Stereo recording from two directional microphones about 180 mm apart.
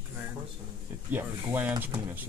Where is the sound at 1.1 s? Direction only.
10° right (ahead or behind).